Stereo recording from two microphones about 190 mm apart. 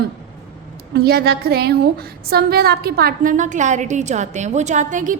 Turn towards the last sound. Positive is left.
turn(degrees=-40)  # may be behind; listen again after turning